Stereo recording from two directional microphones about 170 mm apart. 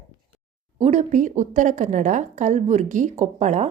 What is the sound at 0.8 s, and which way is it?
A woman's voice, 45° right (ahead or behind).